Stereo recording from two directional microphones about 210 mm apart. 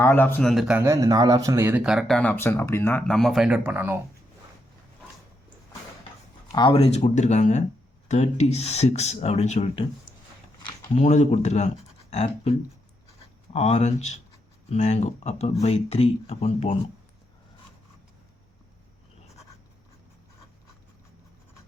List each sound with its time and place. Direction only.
0.0 s speech: 10° left (ahead or behind)
0.8 s speech: 15° right (ahead or behind)
6.5 s speech: 20° left (ahead or behind)
10.9 s speech: 35° left (ahead or behind)